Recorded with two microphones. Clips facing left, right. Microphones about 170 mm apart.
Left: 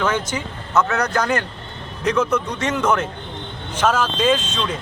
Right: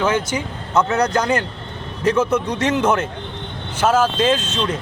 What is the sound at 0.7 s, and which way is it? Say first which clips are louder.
Speech: right 2 dB; 30° right (ahead or behind).